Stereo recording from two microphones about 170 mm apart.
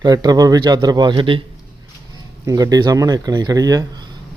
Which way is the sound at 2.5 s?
20° right (ahead or behind).